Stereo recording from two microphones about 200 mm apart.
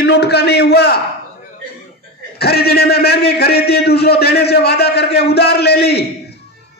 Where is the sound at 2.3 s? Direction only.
50° left (ahead or behind).